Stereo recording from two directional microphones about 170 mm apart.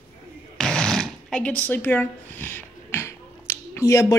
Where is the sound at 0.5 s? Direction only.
5° left (ahead or behind).